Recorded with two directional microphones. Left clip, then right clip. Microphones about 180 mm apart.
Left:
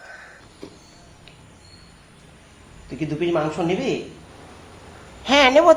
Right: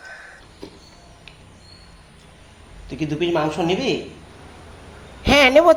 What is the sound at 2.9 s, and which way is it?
Speech, centre (ahead or behind).